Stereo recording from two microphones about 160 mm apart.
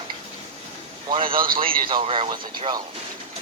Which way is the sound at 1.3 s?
65° right (ahead or behind).